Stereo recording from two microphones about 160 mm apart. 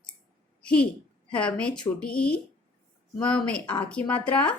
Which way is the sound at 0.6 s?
5° left (ahead or behind).